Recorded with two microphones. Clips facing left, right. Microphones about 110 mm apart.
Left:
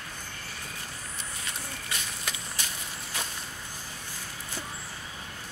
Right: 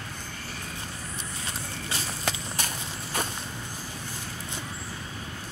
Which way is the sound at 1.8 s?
30° right (ahead or behind).